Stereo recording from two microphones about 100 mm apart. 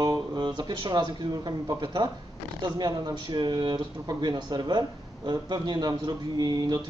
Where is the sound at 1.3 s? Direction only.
40° right (ahead or behind).